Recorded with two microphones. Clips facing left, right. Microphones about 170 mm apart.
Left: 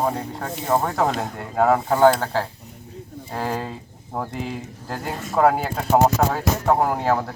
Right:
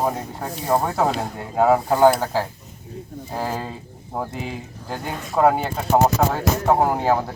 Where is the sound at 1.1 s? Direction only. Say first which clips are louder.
Right 1 dB; centre (ahead or behind).